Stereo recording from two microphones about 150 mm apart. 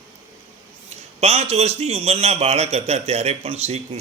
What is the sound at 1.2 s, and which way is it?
A man's voice, 45° right (ahead or behind).